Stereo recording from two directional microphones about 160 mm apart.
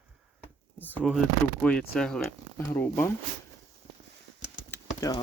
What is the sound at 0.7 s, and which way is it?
Speech, 10° left (ahead or behind).